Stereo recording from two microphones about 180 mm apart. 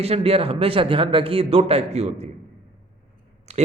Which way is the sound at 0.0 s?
35° right (ahead or behind).